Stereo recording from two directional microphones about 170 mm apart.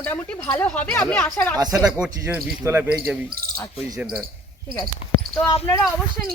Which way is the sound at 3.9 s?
5° right (ahead or behind).